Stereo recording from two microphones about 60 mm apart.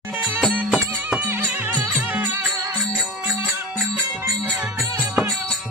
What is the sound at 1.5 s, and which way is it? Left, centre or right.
Music, right.